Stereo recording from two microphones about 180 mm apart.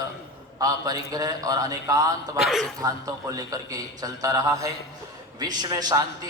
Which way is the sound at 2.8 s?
20° right (ahead or behind).